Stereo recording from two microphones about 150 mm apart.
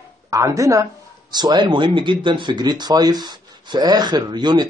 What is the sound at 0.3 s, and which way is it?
Speech, 20° right (ahead or behind).